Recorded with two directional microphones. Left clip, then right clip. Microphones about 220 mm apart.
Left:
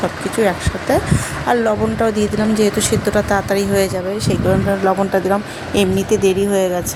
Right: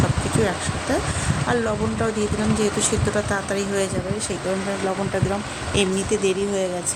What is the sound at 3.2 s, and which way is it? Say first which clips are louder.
Speech: left 7 dB; 20° left (ahead or behind).